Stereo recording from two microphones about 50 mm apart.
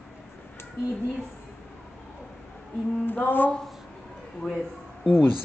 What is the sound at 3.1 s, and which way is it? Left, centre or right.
Speech, left.